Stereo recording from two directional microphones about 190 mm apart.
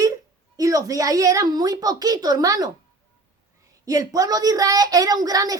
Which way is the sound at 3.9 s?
20° right (ahead or behind).